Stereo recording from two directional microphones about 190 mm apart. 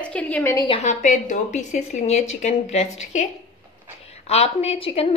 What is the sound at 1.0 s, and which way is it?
A woman's voice, 40° left (ahead or behind).